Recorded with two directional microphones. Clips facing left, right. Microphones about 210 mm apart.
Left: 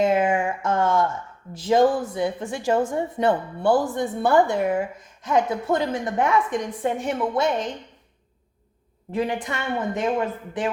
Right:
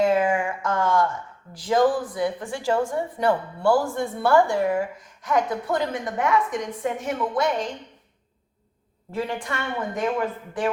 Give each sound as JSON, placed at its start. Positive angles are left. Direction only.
{"t": 0.0, "sound": "a sound", "side_deg": 20}
{"t": 1.5, "sound": "speech", "side_deg": 25}
{"t": 9.1, "sound": "speech", "side_deg": 20}